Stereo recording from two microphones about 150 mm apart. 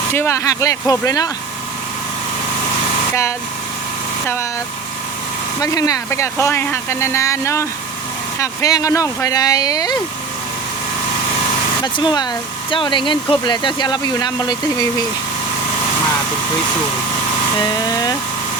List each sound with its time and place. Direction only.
0.1 s speech: 15° left (ahead or behind)
5.5 s speech: 25° left (ahead or behind)
11.8 s speech: 30° left (ahead or behind)